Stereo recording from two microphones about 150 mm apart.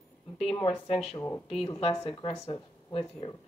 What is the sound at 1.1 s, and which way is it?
Speech, 20° left (ahead or behind).